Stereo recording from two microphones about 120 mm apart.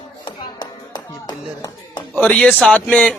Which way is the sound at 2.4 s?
Centre (ahead or behind).